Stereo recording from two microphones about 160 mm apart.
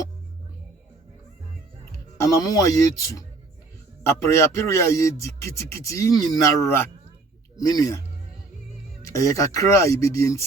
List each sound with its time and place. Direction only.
1.8 s speech: 20° left (ahead or behind)